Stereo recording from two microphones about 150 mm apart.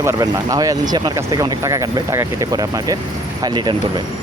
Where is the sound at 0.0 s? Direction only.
20° right (ahead or behind).